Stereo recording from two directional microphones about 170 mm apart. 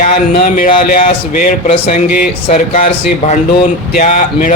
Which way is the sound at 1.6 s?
35° left (ahead or behind).